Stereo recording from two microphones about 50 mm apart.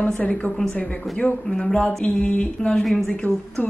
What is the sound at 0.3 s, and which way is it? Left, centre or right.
Speech, centre.